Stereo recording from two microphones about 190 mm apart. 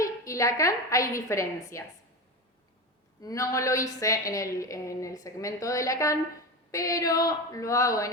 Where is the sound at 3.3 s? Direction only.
15° left (ahead or behind).